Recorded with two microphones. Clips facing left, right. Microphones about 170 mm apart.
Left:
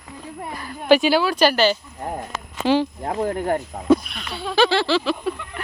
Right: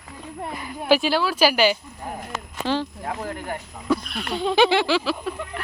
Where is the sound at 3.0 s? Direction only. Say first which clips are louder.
Left 6 dB; 35° left (ahead or behind).